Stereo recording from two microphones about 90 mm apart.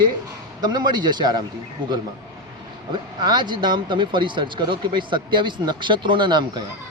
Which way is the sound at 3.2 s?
55° right (ahead or behind).